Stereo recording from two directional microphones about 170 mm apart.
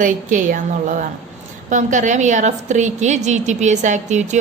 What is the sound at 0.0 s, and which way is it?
A woman's voice, 50° right (ahead or behind).